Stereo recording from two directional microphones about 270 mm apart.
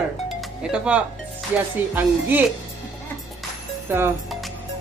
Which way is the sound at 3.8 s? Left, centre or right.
Centre.